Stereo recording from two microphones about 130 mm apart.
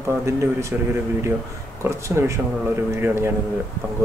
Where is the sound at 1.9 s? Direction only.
20° right (ahead or behind).